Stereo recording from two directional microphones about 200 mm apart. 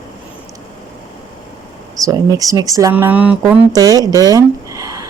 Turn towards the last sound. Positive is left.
turn(degrees=-15)  # may be behind; listen again after turning